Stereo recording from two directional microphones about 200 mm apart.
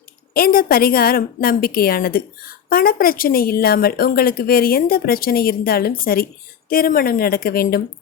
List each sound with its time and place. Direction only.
0.3 s speech: 45° left (ahead or behind)